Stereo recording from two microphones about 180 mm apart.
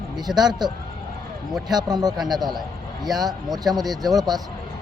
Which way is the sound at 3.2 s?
20° right (ahead or behind).